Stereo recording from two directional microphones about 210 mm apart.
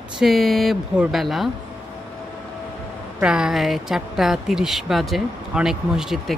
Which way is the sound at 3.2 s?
5° right (ahead or behind).